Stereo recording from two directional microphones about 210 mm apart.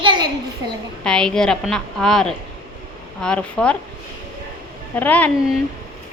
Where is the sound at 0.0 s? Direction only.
20° right (ahead or behind).